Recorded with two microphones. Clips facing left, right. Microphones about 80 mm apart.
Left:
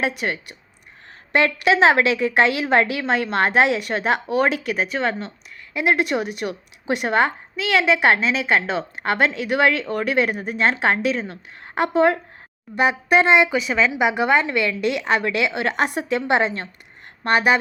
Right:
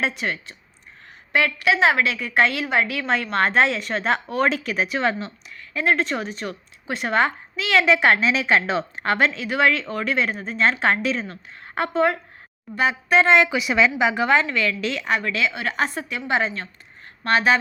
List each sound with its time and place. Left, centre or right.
0.0 s speech: centre
1.3 s a woman's voice: left; by 5.3 s centre
5.7 s speech: centre
13.5 s a woman's voice: centre